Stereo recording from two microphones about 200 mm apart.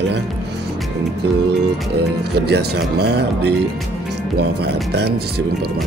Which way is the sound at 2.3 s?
55° right (ahead or behind).